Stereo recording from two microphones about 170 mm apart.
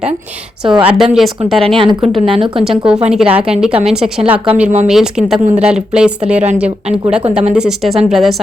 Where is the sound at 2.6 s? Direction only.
5° right (ahead or behind).